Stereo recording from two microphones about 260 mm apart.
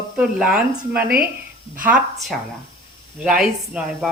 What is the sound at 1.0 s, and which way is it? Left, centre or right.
Speech, right.